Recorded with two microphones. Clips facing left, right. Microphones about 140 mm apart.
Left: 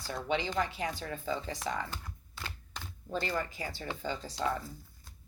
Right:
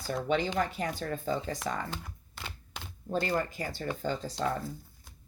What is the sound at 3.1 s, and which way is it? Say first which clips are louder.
Speech: right 4 dB; 50° right (ahead or behind).